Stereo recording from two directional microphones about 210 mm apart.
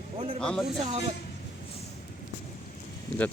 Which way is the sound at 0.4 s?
Centre (ahead or behind).